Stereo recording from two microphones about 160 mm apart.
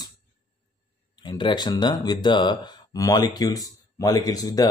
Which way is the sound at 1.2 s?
30° left (ahead or behind).